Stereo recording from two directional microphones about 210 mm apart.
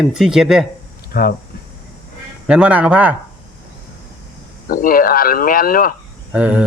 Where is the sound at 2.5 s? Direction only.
5° right (ahead or behind).